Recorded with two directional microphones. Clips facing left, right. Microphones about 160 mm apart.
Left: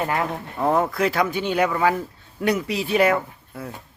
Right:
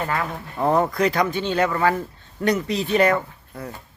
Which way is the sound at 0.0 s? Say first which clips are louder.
Left 2 dB; 25° left (ahead or behind).